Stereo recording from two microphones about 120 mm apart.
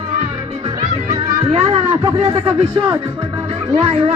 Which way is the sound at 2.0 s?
30° right (ahead or behind).